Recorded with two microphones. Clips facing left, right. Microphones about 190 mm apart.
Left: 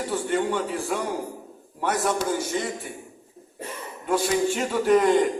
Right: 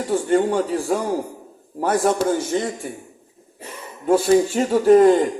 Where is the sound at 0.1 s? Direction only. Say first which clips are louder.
Right 8 dB; 45° right (ahead or behind).